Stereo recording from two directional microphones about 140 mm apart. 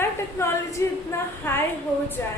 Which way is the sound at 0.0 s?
20° left (ahead or behind).